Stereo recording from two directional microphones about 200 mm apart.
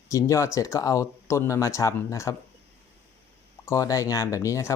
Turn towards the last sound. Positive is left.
turn(degrees=15)  # may be behind; listen again after turning